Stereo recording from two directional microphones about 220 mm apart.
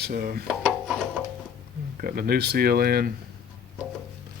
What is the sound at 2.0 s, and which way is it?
Speech, 40° right (ahead or behind).